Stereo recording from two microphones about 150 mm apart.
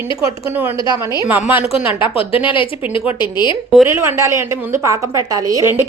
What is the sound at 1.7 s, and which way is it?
Speech, 35° left (ahead or behind).